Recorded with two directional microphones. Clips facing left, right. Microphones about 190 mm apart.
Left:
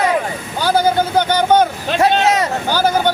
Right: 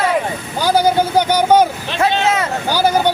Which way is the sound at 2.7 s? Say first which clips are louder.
Right 2 dB; 10° right (ahead or behind).